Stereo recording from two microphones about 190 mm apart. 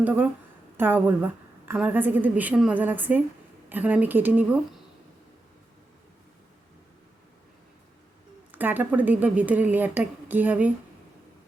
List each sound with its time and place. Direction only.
0.0 s a woman's voice: 10° right (ahead or behind)
8.5 s a woman's voice: 10° right (ahead or behind)